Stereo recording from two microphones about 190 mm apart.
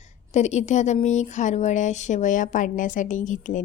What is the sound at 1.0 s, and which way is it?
Speech, 40° left (ahead or behind).